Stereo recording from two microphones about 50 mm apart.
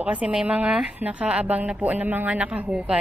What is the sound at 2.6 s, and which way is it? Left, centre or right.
Speech, centre.